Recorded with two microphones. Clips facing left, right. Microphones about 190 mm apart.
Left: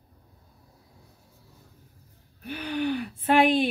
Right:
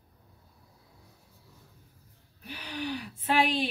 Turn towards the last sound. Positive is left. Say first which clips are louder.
# left 6 dB
turn(degrees=55)  # may be behind; listen again after turning